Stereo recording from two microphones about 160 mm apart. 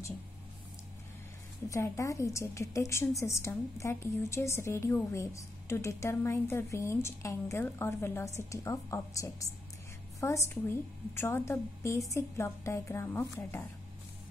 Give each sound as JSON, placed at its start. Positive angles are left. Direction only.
{"t": 1.7, "sound": "a woman's voice", "side_deg": 20}